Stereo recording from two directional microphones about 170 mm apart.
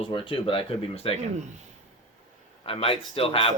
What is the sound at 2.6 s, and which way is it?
Speech, 35° left (ahead or behind).